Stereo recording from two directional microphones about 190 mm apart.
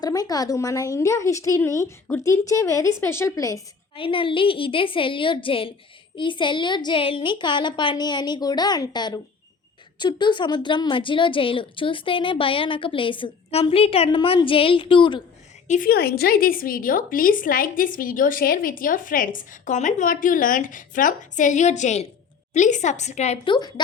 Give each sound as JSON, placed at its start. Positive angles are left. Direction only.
{"t": 0.0, "sound": "a woman's voice", "side_deg": 20}
{"t": 3.9, "sound": "a woman's voice", "side_deg": 25}
{"t": 15.6, "sound": "a woman's voice", "side_deg": 45}